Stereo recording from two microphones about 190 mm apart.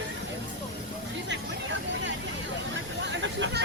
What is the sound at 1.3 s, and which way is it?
Vehicle, 70° right (ahead or behind).